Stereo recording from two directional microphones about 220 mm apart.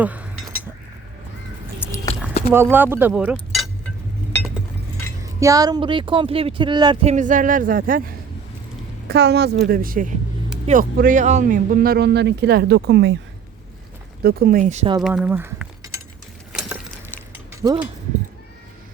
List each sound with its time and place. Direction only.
0.0 s speech: 5° right (ahead or behind)
2.5 s speech: 10° right (ahead or behind)
5.2 s speech: 15° right (ahead or behind); by 13.1 s 50° right (ahead or behind)
14.2 s speech: 45° right (ahead or behind)
15.0 s a sound: 5° right (ahead or behind)
17.6 s speech: 10° right (ahead or behind)